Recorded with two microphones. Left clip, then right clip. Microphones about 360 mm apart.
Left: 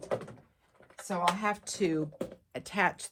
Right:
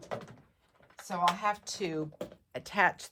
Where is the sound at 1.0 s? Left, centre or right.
Centre.